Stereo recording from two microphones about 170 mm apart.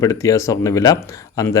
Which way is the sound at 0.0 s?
20° left (ahead or behind).